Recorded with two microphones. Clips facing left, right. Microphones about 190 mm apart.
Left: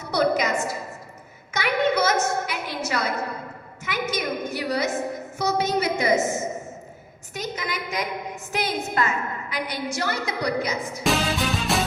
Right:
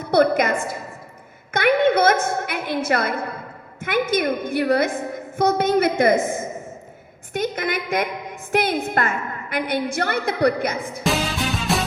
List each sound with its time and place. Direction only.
0.0 s a woman's voice: 55° right (ahead or behind)
11.0 s music: centre (ahead or behind)